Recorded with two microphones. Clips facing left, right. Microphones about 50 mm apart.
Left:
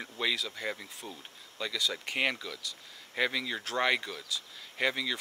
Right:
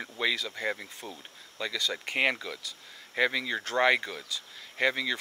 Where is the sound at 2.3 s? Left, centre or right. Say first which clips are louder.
Right 2 dB; centre.